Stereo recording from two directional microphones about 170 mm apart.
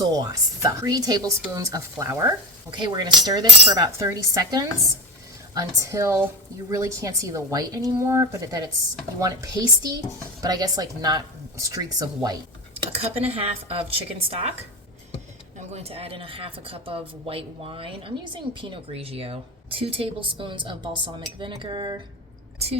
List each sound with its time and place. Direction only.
0.0 s a woman's voice: 20° right (ahead or behind)
2.6 s a woman's voice: 25° right (ahead or behind)
12.8 s a woman's voice: 35° right (ahead or behind)